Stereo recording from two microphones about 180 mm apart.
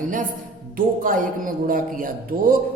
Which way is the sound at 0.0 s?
45° right (ahead or behind).